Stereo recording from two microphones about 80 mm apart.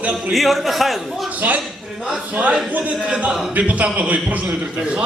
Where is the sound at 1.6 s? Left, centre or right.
Centre.